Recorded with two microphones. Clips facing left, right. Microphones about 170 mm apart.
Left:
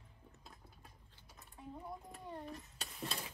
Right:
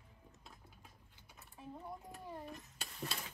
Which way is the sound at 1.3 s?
Centre (ahead or behind).